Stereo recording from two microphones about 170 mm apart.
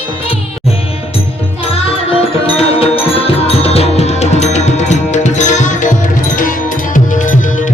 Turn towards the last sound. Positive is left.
turn(degrees=50)  # may be behind; listen again after turning